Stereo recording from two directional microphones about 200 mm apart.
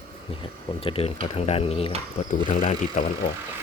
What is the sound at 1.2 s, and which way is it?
Speech, 30° left (ahead or behind).